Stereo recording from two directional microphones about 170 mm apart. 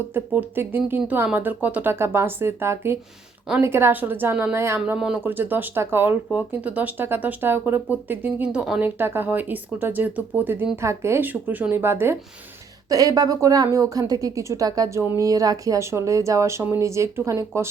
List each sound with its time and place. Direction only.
0.1 s speech: 15° right (ahead or behind)